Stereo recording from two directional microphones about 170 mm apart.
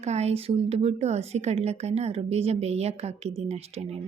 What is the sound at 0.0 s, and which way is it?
Speech, 40° right (ahead or behind).